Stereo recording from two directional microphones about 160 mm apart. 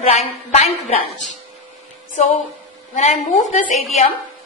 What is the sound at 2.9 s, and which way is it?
Speech, 50° left (ahead or behind).